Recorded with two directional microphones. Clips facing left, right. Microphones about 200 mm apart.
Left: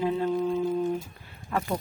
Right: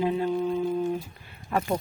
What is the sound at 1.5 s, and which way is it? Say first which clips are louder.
Speech: right 2 dB; 15° right (ahead or behind).